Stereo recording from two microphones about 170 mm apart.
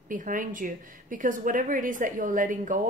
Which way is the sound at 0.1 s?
50° right (ahead or behind).